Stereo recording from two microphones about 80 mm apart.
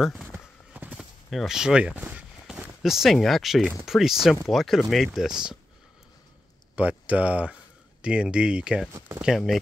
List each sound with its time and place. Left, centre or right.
0.0 s speech: centre
0.9 s clip-clop: centre
2.8 s speech: centre
6.7 s speech: centre